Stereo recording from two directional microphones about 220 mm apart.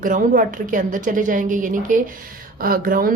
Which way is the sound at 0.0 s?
35° right (ahead or behind).